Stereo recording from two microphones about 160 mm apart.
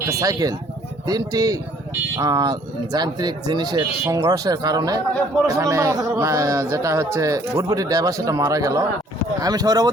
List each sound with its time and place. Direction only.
0.1 s a man's voice: 20° right (ahead or behind)